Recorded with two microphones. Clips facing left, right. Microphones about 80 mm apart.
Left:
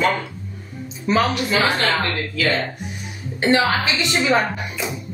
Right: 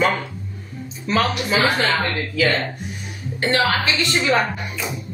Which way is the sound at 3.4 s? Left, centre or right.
Left.